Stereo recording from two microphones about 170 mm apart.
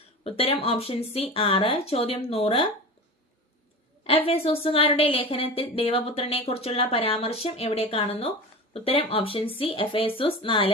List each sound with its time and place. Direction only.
0.3 s speech: 35° left (ahead or behind)
4.3 s speech: 35° left (ahead or behind)